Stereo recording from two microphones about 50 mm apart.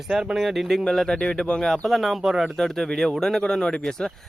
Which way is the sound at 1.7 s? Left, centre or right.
Centre.